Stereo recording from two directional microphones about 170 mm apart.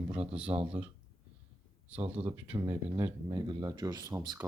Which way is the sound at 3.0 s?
25° right (ahead or behind).